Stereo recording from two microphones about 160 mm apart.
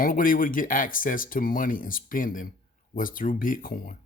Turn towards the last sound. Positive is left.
turn(degrees=65)  # may be behind; listen again after turning